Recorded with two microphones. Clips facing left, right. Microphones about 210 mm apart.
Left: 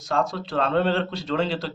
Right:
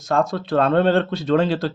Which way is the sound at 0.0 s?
50° right (ahead or behind).